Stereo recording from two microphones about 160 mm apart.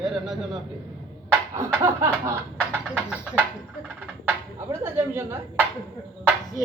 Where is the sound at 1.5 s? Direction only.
15° right (ahead or behind).